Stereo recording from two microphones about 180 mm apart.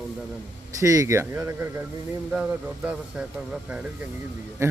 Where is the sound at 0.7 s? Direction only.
20° right (ahead or behind).